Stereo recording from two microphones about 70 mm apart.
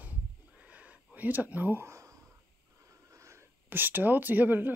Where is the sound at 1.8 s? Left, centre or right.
Right.